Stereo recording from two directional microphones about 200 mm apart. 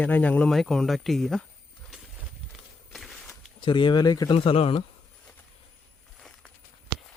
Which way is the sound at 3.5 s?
25° left (ahead or behind).